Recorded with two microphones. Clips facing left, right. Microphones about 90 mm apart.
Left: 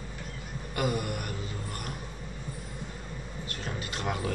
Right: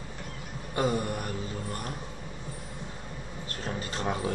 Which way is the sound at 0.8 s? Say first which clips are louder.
Right 2 dB; 30° right (ahead or behind).